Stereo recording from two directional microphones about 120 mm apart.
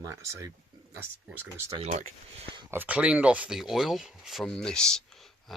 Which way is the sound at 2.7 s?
10° right (ahead or behind).